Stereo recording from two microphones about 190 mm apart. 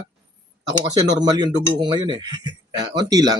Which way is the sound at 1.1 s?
20° right (ahead or behind).